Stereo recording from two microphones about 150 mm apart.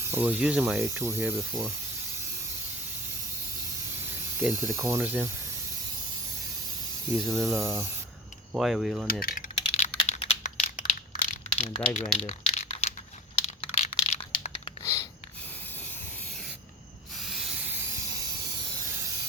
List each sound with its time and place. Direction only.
0.0 s speech: 15° right (ahead or behind)
4.4 s speech: 15° right (ahead or behind)
7.1 s speech: 5° left (ahead or behind)
7.3 s speech: 20° right (ahead or behind)
8.5 s speech: centre (ahead or behind)
9.7 s crumpling: 45° left (ahead or behind)
11.9 s crumpling: 45° left (ahead or behind)
13.6 s a sound: 45° left (ahead or behind)
17.2 s hiss: centre (ahead or behind)
17.7 s hiss: 15° right (ahead or behind)
18.9 s steam: 20° right (ahead or behind)